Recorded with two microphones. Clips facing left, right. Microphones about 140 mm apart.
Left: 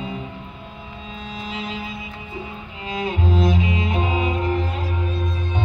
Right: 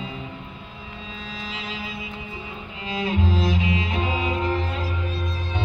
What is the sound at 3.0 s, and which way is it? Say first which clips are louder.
Music: left 2 dB; 50° left (ahead or behind).